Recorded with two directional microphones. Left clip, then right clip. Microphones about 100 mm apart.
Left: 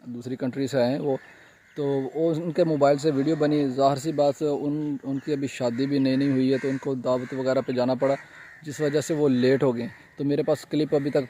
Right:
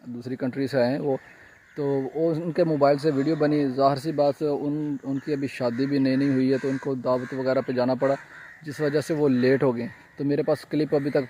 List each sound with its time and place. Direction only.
0.2 s a man's voice: 15° left (ahead or behind)